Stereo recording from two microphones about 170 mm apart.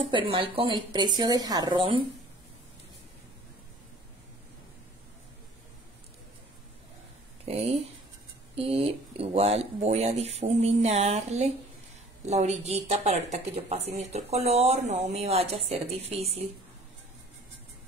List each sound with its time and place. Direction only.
0.0 s speech: 30° right (ahead or behind)
7.4 s speech: 35° right (ahead or behind)